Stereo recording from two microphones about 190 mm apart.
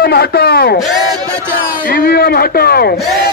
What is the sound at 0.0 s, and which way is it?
Speech, 55° left (ahead or behind).